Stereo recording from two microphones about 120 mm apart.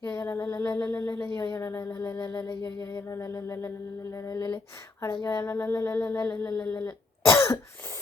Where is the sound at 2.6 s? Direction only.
25° left (ahead or behind).